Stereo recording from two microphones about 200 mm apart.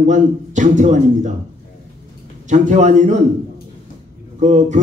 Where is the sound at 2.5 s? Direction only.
40° right (ahead or behind).